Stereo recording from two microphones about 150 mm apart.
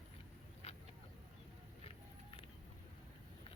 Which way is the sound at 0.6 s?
40° left (ahead or behind).